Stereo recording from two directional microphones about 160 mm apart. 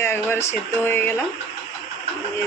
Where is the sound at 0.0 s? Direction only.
15° left (ahead or behind).